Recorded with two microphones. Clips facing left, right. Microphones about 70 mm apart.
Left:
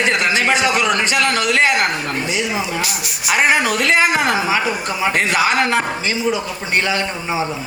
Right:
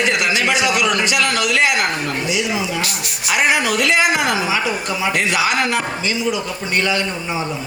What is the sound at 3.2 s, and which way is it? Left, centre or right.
Speech, left.